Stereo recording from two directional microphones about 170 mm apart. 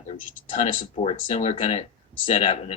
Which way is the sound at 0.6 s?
35° left (ahead or behind).